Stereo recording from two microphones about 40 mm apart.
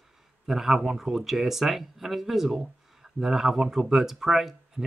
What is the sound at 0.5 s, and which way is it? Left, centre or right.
Speech, centre.